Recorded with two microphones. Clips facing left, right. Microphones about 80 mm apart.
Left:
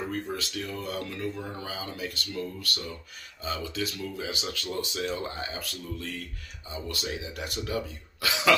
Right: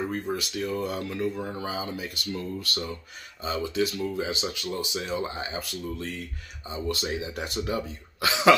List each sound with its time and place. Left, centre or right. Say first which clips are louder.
0.1 s speech: right 3 dB; right
4.7 s speech: even; centre; by 8.5 s right